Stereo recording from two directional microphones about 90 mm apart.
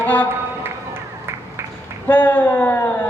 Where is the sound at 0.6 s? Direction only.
25° right (ahead or behind).